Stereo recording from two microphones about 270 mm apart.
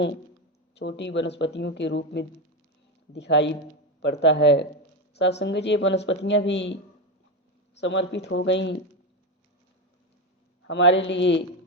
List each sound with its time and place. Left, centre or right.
0.8 s speech: left
7.8 s speech: left
10.7 s speech: left